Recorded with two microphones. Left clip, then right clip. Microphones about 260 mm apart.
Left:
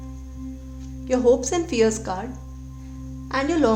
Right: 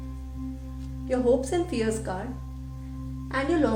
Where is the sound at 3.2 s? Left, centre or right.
Left.